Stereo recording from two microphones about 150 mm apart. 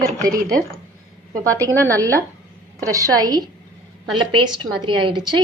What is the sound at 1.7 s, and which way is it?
Speech, 15° left (ahead or behind).